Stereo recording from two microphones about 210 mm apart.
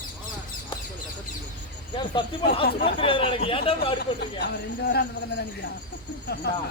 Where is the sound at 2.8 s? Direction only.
25° left (ahead or behind).